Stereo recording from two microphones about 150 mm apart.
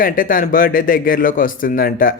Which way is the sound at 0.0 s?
70° left (ahead or behind).